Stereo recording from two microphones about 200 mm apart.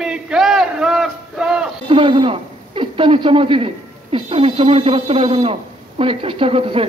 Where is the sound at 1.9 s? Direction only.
25° right (ahead or behind).